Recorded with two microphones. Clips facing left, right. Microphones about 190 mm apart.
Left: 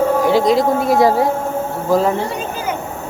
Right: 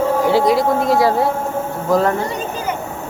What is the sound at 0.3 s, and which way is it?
Speech, 20° left (ahead or behind).